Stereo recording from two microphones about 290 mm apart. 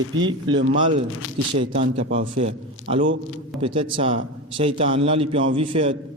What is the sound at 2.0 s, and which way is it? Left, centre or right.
Speech, right.